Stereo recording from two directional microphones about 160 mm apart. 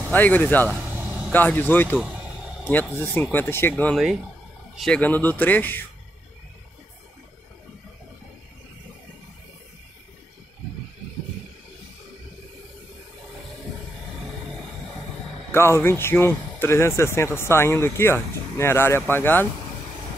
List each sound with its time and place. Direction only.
0.1 s speech: 10° left (ahead or behind)
15.5 s speech: 15° left (ahead or behind)